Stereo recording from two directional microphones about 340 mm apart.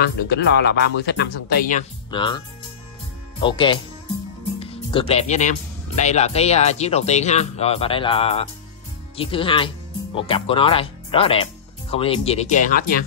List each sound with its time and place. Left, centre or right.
0.0 s speech: left